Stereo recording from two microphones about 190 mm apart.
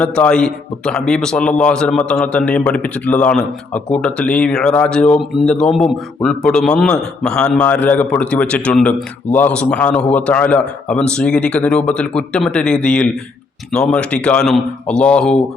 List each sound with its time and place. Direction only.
0.0 s speech: 5° left (ahead or behind)